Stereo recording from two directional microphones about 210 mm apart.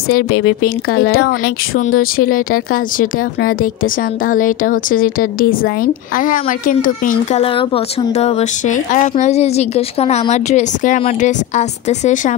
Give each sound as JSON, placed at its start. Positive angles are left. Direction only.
{"t": 0.1, "sound": "speech", "side_deg": 65}
{"t": 0.9, "sound": "speech", "side_deg": 45}
{"t": 7.4, "sound": "speech", "side_deg": 25}